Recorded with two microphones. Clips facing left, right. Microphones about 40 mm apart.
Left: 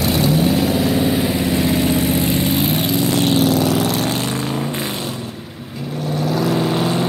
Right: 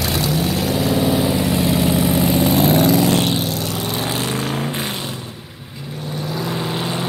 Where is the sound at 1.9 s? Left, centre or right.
Right.